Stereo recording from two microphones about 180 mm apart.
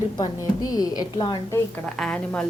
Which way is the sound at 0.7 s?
20° left (ahead or behind).